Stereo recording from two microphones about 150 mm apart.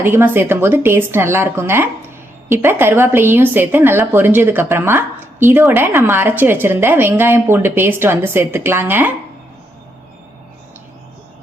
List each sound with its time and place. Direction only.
0.0 s speech: 15° right (ahead or behind)